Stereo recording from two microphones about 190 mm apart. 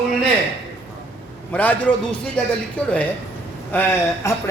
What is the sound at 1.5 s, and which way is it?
A man's voice, 10° left (ahead or behind).